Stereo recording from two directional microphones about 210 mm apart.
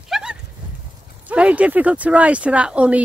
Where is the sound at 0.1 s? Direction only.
5° right (ahead or behind).